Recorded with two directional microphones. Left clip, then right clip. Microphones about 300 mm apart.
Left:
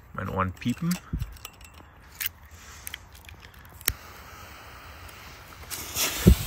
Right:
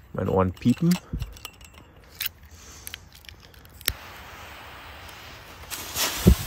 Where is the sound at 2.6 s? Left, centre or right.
Right.